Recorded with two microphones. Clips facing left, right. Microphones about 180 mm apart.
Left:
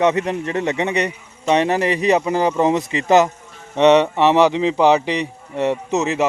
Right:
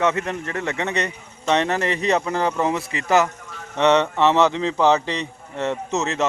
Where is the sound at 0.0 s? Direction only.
15° left (ahead or behind).